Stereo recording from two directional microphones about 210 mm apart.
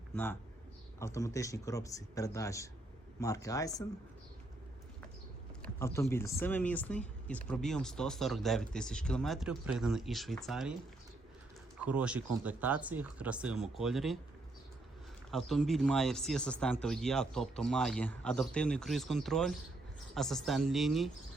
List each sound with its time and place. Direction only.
0.9 s speech: 15° left (ahead or behind)
5.6 s speech: 15° left (ahead or behind)
11.9 s speech: 5° right (ahead or behind)
15.3 s speech: centre (ahead or behind)